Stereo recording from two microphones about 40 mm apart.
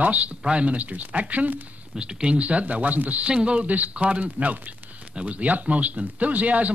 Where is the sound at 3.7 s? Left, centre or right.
Right.